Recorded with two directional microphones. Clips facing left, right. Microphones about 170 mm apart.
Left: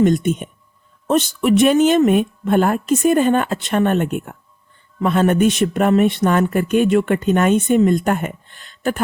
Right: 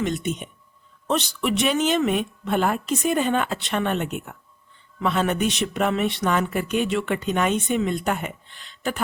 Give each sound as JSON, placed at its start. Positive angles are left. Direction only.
{"t": 0.0, "sound": "speech", "side_deg": 50}